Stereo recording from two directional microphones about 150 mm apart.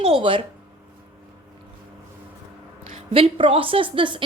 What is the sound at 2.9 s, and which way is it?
Speech, 40° right (ahead or behind).